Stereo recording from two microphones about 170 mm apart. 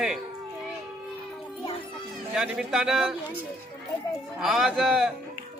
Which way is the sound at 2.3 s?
5° right (ahead or behind).